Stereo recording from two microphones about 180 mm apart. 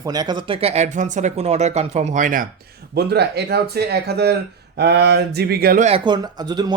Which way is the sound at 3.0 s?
65° right (ahead or behind).